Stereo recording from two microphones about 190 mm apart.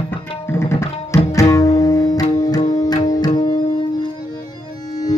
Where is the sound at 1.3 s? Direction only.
15° left (ahead or behind).